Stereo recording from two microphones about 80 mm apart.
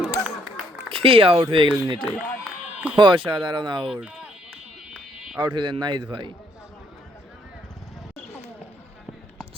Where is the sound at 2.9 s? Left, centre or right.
Right.